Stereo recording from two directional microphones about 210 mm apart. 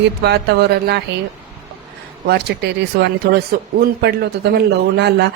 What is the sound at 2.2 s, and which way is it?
A woman's voice, 50° right (ahead or behind).